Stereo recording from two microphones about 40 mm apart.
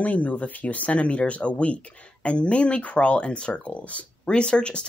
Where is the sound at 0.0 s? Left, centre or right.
Left.